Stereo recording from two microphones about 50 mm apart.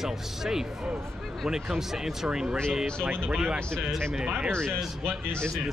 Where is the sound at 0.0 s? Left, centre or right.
Centre.